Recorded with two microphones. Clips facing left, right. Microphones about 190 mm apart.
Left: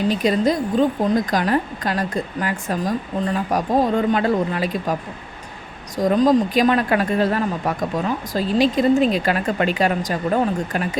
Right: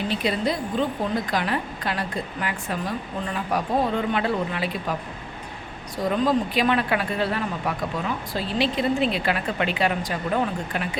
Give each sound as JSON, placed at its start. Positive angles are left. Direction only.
{"t": 0.1, "sound": "a woman's voice", "side_deg": 45}
{"t": 6.0, "sound": "a woman's voice", "side_deg": 40}